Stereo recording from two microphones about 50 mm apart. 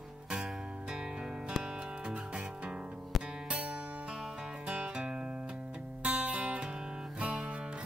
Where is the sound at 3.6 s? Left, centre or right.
Right.